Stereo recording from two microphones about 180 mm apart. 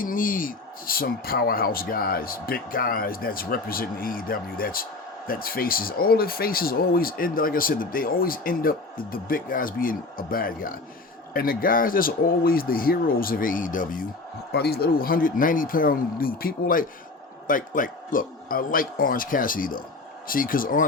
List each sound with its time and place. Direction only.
0.0 s speech: 50° left (ahead or behind)
14.5 s speech: 60° left (ahead or behind)